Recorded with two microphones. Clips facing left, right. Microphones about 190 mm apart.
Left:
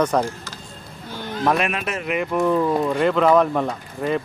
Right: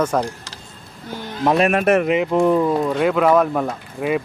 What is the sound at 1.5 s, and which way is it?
Speech, 45° right (ahead or behind).